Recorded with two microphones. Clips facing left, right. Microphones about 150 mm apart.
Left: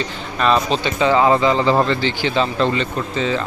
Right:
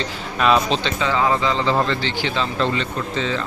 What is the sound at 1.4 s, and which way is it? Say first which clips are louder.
Speech: left 4 dB; 15° left (ahead or behind).